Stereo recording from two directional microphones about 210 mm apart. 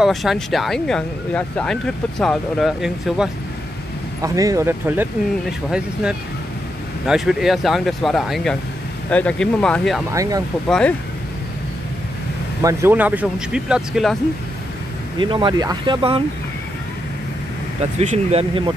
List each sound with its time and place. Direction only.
0.0 s speech: centre (ahead or behind)
4.2 s speech: 15° right (ahead or behind)
7.1 s speech: centre (ahead or behind)
10.1 s speech: 15° right (ahead or behind)
10.7 s speech: 5° left (ahead or behind)
12.6 s speech: 10° right (ahead or behind)
15.1 s speech: 20° right (ahead or behind)
17.9 s speech: 30° right (ahead or behind)